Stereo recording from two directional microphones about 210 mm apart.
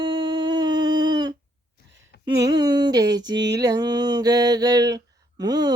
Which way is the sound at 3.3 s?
55° right (ahead or behind).